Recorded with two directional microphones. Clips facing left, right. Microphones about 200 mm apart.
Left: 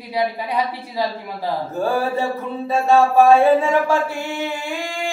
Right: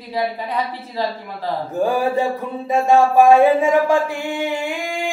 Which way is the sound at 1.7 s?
15° right (ahead or behind).